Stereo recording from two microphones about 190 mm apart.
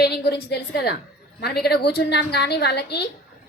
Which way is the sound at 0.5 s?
55° left (ahead or behind).